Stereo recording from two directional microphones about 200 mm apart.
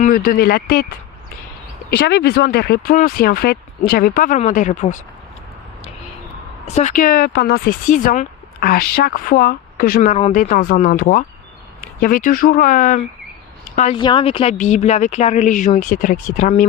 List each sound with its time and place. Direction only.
0.0 s speech: 50° left (ahead or behind)
6.7 s speech: 35° left (ahead or behind)
13.9 s speech: 25° left (ahead or behind)